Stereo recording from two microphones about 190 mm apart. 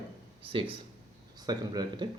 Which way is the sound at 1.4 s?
20° right (ahead or behind).